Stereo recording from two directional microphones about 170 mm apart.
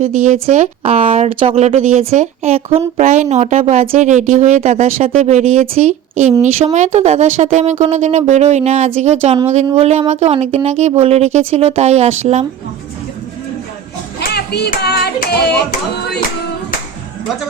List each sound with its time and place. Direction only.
0.0 s speech: 45° right (ahead or behind)
14.2 s singing: 70° left (ahead or behind)